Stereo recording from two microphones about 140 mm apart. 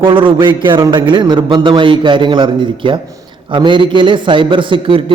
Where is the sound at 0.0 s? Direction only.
35° right (ahead or behind).